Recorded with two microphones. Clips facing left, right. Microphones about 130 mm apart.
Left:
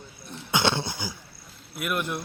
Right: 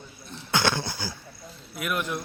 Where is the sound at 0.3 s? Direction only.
20° left (ahead or behind).